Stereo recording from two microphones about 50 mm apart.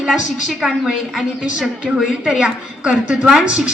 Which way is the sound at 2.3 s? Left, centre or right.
Centre.